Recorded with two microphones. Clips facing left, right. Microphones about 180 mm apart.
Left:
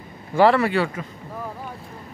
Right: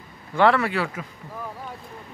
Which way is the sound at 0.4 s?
Centre (ahead or behind).